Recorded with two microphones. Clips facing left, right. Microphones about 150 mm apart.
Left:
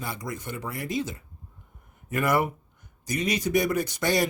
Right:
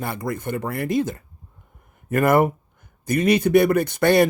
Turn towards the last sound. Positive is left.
turn(degrees=-60)  # may be behind; listen again after turning